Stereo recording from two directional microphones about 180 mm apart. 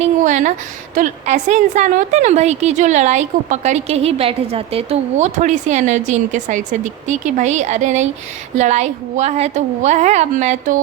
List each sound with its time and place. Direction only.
0.0 s a woman's voice: 45° right (ahead or behind)